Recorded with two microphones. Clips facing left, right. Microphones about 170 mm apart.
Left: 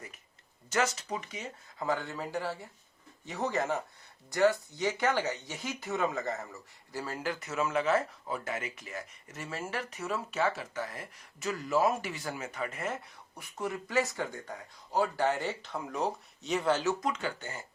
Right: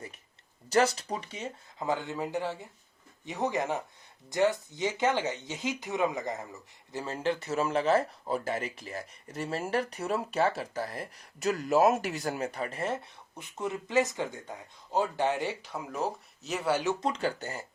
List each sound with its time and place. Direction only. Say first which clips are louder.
0.7 s speech: right 5 dB; 35° right (ahead or behind); by 16.9 s 10° right (ahead or behind)
17.0 s speech: right 3 dB; 35° right (ahead or behind)